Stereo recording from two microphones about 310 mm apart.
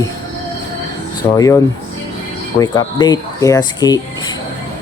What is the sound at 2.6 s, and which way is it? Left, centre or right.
Speech, centre.